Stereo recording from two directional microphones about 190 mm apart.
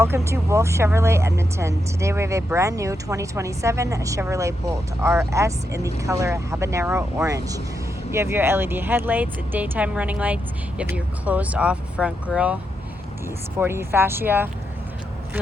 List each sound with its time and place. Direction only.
0.0 s speech: 15° right (ahead or behind)
13.6 s speech: 10° right (ahead or behind)